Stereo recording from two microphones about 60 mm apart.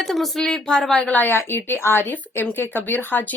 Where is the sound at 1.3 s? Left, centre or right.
Left.